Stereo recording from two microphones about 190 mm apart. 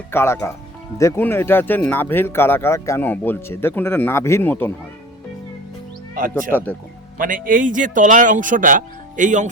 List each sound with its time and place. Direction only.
0.1 s speech: 15° left (ahead or behind)
6.1 s speech: 45° right (ahead or behind)